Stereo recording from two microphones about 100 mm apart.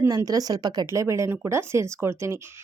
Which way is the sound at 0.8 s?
30° right (ahead or behind).